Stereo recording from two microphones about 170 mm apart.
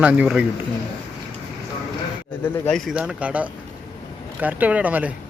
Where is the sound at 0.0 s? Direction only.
5° right (ahead or behind).